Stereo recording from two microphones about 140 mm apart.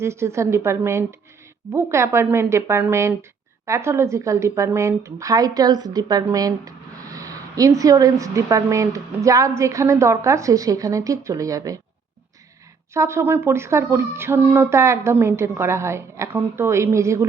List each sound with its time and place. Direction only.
0.0 s a woman's voice: 20° right (ahead or behind)
12.9 s a woman's voice: 20° right (ahead or behind)